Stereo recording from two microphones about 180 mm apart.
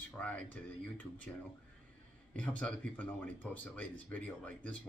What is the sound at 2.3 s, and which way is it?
Speech, 5° left (ahead or behind).